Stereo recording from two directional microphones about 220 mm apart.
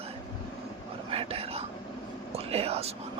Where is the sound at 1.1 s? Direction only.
25° right (ahead or behind).